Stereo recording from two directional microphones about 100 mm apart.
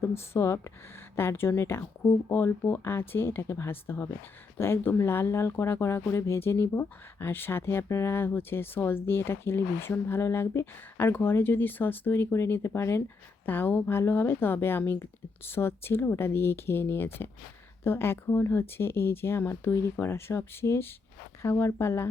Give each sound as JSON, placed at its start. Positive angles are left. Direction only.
{"t": 0.1, "sound": "speech", "side_deg": 25}